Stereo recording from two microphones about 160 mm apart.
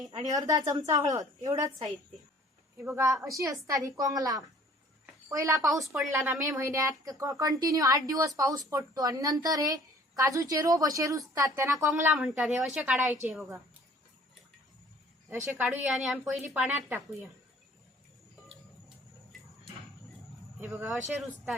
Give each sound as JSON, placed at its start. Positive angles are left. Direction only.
{"t": 0.1, "sound": "speech", "side_deg": -25}
{"t": 2.8, "sound": "a woman's voice", "side_deg": -15}
{"t": 15.5, "sound": "a woman's voice", "side_deg": -10}
{"t": 20.6, "sound": "a woman's voice", "side_deg": -15}
{"t": 21.1, "sound": "a woman's voice", "side_deg": -5}